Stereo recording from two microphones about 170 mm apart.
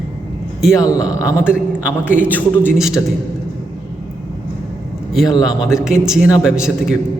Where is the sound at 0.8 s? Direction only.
20° left (ahead or behind).